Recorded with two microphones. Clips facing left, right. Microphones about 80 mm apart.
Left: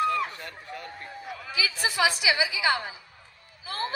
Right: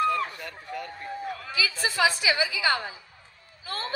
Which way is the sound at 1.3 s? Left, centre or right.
Centre.